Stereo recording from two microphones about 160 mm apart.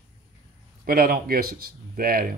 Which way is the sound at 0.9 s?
65° right (ahead or behind).